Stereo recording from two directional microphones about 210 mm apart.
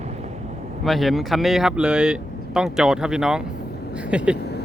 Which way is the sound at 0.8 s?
Centre (ahead or behind).